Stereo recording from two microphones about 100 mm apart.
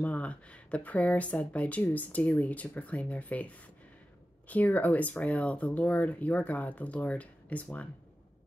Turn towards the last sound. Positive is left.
turn(degrees=15)  # may be behind; listen again after turning